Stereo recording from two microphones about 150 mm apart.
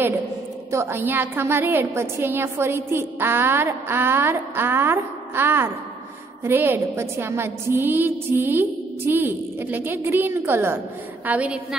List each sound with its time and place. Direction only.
0.7 s a woman's voice: 15° right (ahead or behind)